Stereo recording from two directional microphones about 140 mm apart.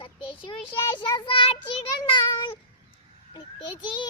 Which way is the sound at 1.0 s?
35° left (ahead or behind).